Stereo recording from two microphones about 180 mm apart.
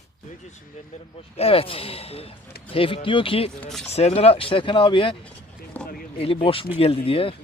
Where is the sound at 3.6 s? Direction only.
Centre (ahead or behind).